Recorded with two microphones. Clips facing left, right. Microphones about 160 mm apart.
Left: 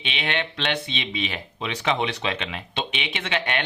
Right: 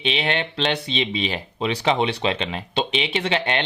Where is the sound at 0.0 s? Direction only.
35° right (ahead or behind).